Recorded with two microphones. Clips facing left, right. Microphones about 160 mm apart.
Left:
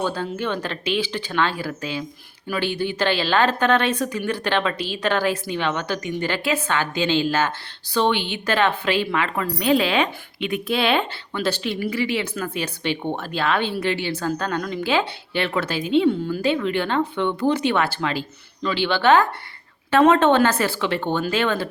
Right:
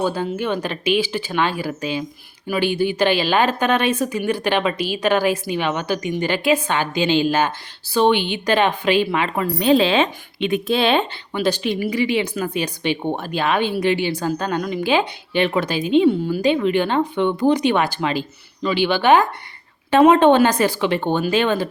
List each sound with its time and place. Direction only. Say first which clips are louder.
0.0 s a woman's voice: right 3 dB; 10° right (ahead or behind)
11.3 s speech: right 4 dB; 15° right (ahead or behind)